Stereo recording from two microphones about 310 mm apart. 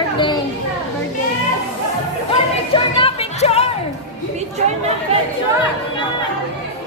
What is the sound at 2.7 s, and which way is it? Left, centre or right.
Music, centre.